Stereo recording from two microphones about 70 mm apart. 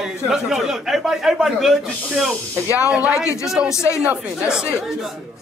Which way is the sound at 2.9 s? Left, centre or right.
Centre.